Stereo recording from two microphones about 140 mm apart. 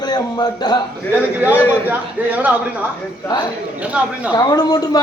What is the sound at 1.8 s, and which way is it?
Speech, 10° right (ahead or behind).